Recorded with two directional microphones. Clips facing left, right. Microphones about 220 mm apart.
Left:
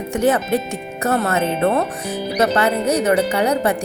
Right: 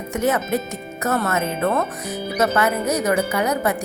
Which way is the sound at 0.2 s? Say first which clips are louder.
Left 3 dB; 30° left (ahead or behind).